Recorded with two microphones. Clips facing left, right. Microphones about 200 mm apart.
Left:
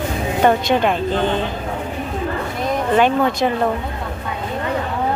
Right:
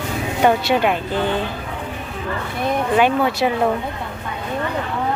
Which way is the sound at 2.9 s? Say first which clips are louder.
Left 2 dB; 10° right (ahead or behind).